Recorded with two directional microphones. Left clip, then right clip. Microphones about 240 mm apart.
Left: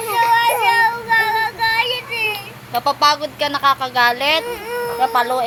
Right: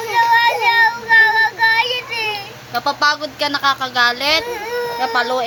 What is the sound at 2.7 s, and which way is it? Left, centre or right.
A woman's voice, right.